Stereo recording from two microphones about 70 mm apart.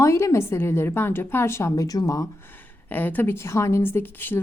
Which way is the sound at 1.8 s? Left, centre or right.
Left.